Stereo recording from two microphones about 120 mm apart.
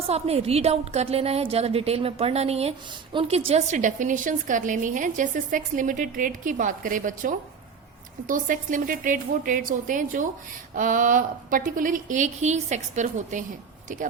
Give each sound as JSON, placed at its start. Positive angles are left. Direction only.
{"t": 0.1, "sound": "a woman's voice", "side_deg": -60}
{"t": 8.3, "sound": "a woman's voice", "side_deg": -90}